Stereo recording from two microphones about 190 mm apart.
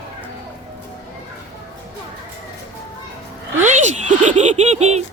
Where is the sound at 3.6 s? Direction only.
40° right (ahead or behind).